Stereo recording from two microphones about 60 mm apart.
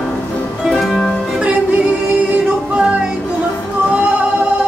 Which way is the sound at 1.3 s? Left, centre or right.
Right.